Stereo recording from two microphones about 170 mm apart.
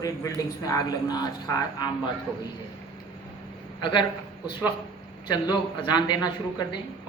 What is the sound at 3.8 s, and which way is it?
Speech, 25° left (ahead or behind).